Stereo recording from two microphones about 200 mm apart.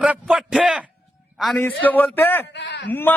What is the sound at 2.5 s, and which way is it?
Speech, 60° left (ahead or behind).